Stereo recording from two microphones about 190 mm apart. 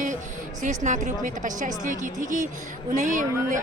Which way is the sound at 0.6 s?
40° right (ahead or behind).